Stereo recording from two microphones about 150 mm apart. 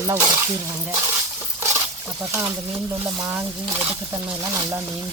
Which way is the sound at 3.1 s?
20° right (ahead or behind).